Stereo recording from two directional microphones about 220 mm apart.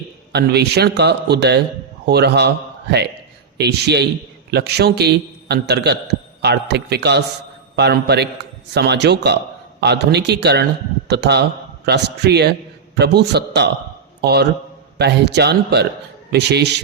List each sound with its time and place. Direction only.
0.3 s a man's voice: 50° right (ahead or behind)
3.6 s a man's voice: 50° right (ahead or behind)